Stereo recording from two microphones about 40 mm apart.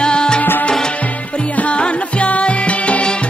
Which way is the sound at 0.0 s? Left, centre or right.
Left.